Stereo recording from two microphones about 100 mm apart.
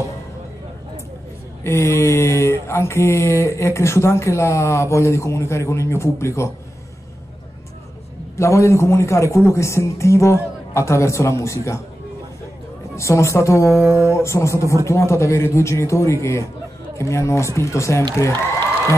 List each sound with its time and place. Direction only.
1.6 s mantra: 25° left (ahead or behind)
8.4 s mantra: 30° left (ahead or behind)
12.9 s mantra: 30° left (ahead or behind)